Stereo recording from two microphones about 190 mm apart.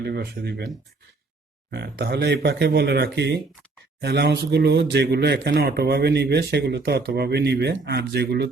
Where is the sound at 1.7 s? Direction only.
60° right (ahead or behind).